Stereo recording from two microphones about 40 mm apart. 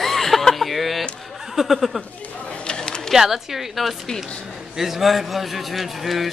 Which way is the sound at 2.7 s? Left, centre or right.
Centre.